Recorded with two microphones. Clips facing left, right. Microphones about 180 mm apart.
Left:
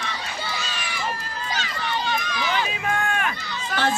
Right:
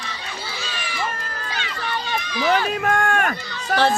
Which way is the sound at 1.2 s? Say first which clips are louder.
Left 1 dB; 55° right (ahead or behind).